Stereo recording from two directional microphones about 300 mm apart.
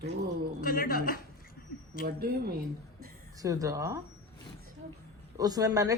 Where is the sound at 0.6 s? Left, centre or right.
Left.